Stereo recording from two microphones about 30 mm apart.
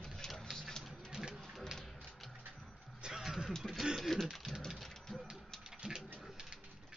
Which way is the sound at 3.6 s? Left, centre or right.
Centre.